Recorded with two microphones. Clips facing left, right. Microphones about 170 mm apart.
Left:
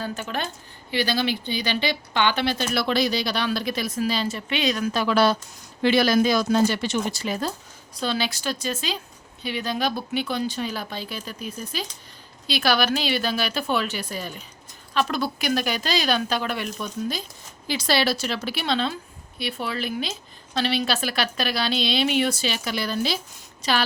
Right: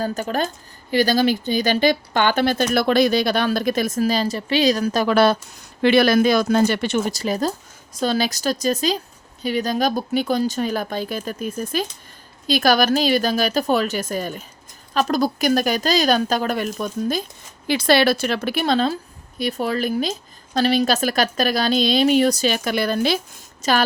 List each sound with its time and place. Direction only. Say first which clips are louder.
0.0 s a woman's voice: right 7 dB; 40° right (ahead or behind); by 7.0 s 60° right (ahead or behind)
7.1 s a woman's voice: right 5 dB; 40° right (ahead or behind)